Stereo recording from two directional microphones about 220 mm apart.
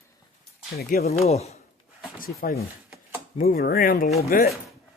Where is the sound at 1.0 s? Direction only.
30° left (ahead or behind).